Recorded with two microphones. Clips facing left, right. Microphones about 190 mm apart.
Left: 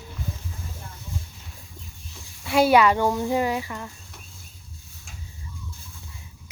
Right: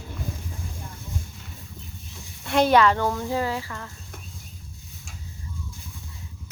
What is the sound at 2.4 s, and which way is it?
Speech, 5° left (ahead or behind).